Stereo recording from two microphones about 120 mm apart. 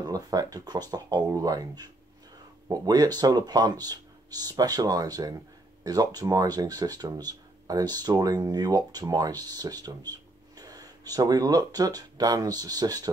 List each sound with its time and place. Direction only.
0.0 s speech: 30° right (ahead or behind)